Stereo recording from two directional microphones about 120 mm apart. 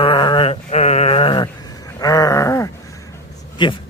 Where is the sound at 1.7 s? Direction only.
30° left (ahead or behind).